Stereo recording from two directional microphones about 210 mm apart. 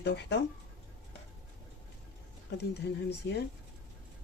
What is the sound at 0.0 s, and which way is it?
Speech, 55° left (ahead or behind).